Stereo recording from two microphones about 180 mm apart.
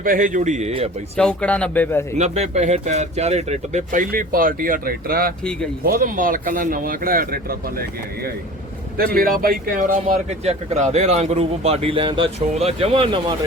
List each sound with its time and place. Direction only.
0.0 s a man's voice: 50° right (ahead or behind)
1.1 s speech: 5° left (ahead or behind)
2.1 s a man's voice: 40° right (ahead or behind)
9.1 s a man's voice: 55° right (ahead or behind); by 13.3 s 25° right (ahead or behind)